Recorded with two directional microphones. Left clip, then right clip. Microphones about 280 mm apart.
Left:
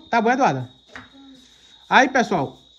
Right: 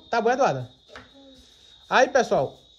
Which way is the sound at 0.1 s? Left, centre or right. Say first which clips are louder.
Left 3 dB; centre.